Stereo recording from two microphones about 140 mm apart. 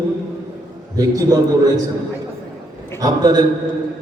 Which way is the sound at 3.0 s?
30° right (ahead or behind).